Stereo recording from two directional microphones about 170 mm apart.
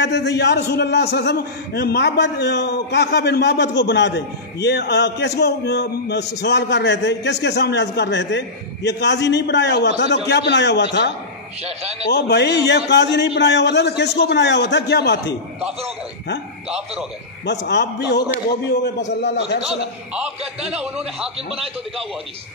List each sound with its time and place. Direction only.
0.0 s a man's voice: 90° left
4.6 s a man's voice: 80° left
6.4 s a man's voice: 90° left
11.6 s a man's voice: 40° right (ahead or behind)
12.1 s a man's voice: 75° left (ahead or behind)
16.6 s a man's voice: 5° right (ahead or behind)
17.5 s a man's voice: 85° left
19.6 s a man's voice: 5° right (ahead or behind)
21.4 s a man's voice: 35° right (ahead or behind)